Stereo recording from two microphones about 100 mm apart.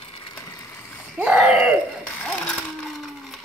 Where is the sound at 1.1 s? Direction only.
10° right (ahead or behind).